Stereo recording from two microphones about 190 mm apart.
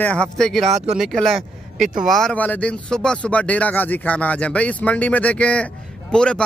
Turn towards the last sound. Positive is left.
turn(degrees=5)  # may be behind; listen again after turning